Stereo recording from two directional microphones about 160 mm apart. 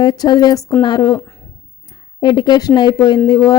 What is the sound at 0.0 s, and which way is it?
Speech, 25° left (ahead or behind).